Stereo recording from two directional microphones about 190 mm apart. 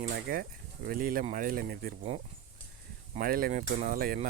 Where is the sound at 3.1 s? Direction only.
50° right (ahead or behind).